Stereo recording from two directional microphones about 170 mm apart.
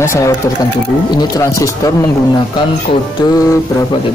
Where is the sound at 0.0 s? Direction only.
15° left (ahead or behind).